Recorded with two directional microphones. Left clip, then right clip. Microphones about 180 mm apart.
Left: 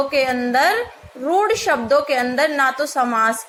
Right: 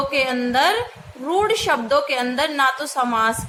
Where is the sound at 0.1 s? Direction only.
15° left (ahead or behind).